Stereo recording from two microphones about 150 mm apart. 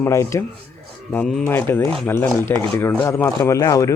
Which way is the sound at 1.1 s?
5° left (ahead or behind).